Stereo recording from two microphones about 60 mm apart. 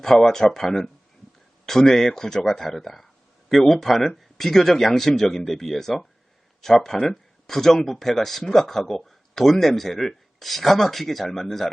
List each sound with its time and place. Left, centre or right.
0.0 s speech: centre